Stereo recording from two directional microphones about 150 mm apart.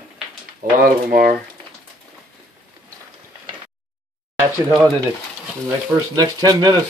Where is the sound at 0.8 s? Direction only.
75° right (ahead or behind).